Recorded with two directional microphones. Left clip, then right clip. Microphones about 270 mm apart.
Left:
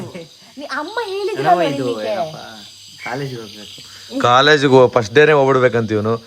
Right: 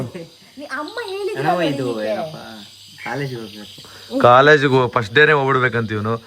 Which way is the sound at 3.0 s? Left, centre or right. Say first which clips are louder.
Left 1 dB; centre.